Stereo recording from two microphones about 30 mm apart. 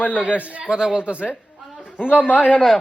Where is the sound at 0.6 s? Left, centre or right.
Right.